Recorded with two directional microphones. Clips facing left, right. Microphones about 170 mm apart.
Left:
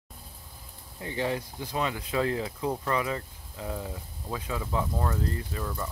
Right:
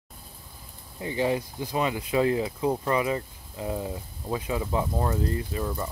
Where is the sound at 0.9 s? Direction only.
10° right (ahead or behind).